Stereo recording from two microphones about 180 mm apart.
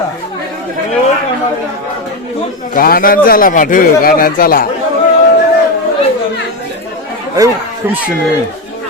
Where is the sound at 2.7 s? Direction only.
55° left (ahead or behind).